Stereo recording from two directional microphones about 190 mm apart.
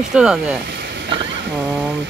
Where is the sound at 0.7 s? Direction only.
65° right (ahead or behind).